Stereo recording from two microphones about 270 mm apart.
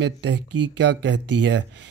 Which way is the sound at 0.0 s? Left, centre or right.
Right.